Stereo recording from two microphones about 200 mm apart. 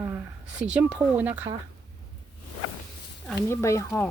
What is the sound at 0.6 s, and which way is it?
Speech, 5° right (ahead or behind).